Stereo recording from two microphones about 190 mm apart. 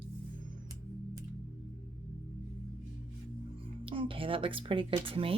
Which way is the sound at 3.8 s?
25° right (ahead or behind).